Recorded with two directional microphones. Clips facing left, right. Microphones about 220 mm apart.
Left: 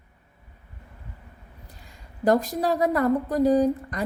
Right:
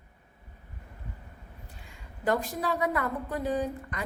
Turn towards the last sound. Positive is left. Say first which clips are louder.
# left 10 dB
turn(degrees=35)  # may be behind; listen again after turning